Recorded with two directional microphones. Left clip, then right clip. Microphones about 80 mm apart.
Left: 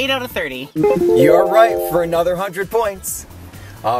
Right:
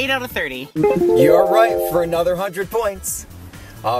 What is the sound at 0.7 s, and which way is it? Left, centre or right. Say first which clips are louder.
Speech: left 1 dB; centre.